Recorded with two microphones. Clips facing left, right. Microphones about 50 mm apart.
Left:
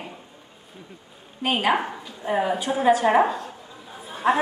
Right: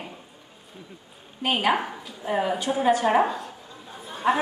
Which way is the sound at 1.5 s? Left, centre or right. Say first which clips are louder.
Left 1 dB; centre.